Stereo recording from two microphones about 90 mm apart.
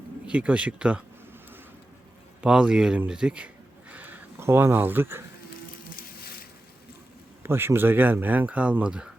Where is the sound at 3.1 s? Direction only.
10° right (ahead or behind).